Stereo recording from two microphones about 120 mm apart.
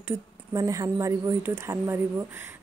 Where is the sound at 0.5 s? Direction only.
30° right (ahead or behind).